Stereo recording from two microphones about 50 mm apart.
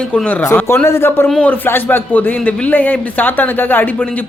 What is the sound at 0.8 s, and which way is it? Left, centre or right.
Speech, left.